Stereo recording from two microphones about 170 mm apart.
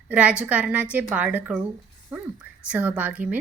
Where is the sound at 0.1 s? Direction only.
5° right (ahead or behind).